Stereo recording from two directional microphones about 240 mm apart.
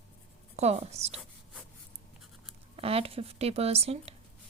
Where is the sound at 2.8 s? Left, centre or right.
Right.